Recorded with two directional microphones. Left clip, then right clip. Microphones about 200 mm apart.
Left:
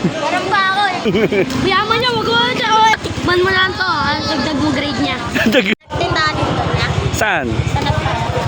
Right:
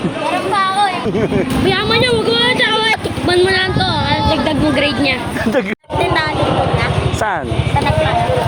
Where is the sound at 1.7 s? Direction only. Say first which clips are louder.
Right 2 dB; 20° left (ahead or behind).